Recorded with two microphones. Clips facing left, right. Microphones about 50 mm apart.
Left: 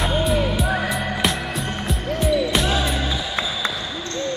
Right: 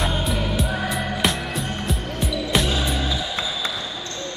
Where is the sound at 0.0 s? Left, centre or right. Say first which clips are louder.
Left 4 dB; centre.